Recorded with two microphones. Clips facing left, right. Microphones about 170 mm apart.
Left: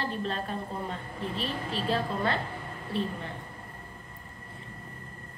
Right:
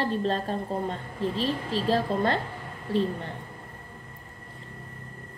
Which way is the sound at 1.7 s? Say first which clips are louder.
Right 4 dB; 40° right (ahead or behind).